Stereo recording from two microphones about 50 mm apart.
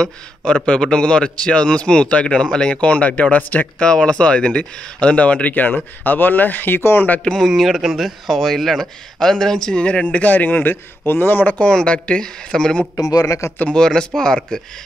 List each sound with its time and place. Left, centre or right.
0.5 s a man's voice: centre; by 3.6 s left
3.8 s speech: centre; by 7.1 s left
7.3 s a man's voice: centre
10.0 s speech: left
11.5 s a man's voice: left
13.4 s speech: left
13.7 s speech: centre